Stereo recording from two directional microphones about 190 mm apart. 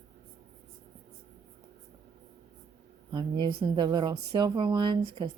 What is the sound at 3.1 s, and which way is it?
Speech, 25° right (ahead or behind).